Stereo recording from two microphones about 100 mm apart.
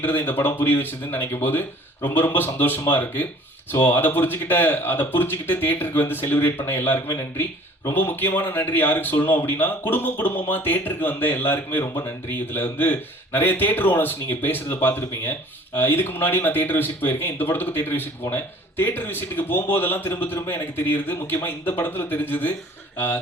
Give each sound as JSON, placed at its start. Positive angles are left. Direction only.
{"t": 0.0, "sound": "speech", "side_deg": 20}